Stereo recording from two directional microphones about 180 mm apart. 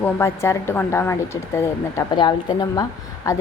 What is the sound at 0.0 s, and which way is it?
A woman's voice, 15° left (ahead or behind).